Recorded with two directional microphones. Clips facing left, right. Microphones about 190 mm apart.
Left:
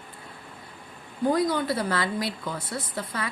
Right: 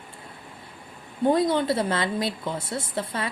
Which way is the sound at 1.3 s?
25° right (ahead or behind).